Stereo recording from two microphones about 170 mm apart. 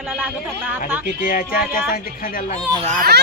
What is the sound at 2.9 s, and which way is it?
Speech, 55° right (ahead or behind).